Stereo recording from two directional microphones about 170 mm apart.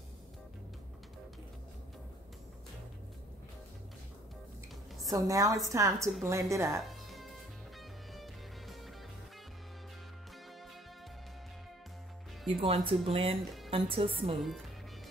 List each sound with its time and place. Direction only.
5.0 s a woman's voice: 20° right (ahead or behind)
6.8 s music: centre (ahead or behind)
12.5 s speech: 30° right (ahead or behind)
14.3 s speech: centre (ahead or behind)